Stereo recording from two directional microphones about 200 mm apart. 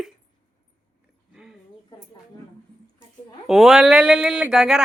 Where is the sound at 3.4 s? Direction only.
Centre (ahead or behind).